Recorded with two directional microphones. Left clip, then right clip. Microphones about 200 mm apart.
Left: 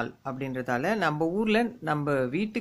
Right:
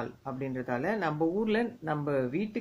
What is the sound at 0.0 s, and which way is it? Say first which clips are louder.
Speech: left 3 dB; 35° left (ahead or behind).